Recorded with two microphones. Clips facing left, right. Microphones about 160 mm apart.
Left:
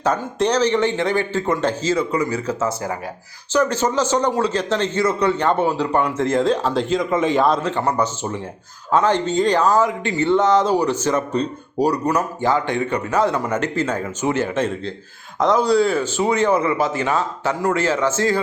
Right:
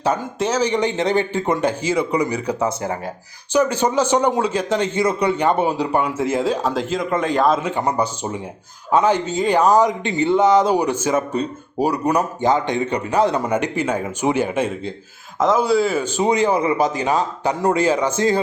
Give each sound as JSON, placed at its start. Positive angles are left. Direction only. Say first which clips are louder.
{"t": 0.0, "sound": "a man's voice", "louder": "left 1 dB", "side_deg": -5}
{"t": 16.1, "sound": "a man's voice", "louder": "right 1 dB", "side_deg": -15}